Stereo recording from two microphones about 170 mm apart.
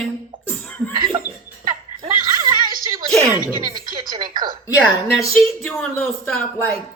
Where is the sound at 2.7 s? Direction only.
55° right (ahead or behind).